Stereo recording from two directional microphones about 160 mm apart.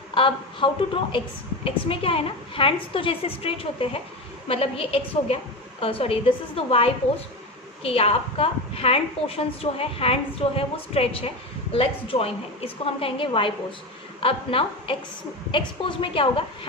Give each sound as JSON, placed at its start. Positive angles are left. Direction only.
{"t": 0.1, "sound": "a woman's voice", "side_deg": 35}